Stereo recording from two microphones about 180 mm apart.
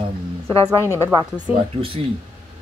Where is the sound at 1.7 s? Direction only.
30° right (ahead or behind).